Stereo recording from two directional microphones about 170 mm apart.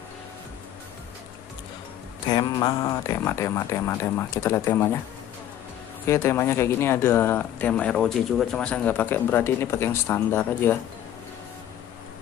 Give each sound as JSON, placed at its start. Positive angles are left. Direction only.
{"t": 2.2, "sound": "speech", "side_deg": 25}
{"t": 6.0, "sound": "speech", "side_deg": 15}